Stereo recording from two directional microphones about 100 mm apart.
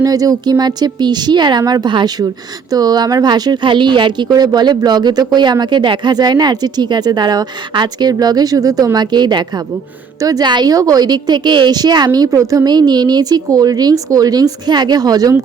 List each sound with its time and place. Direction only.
0.0 s a woman's voice: 35° right (ahead or behind)